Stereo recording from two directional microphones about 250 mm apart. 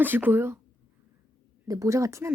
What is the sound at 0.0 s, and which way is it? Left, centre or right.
Speech, centre.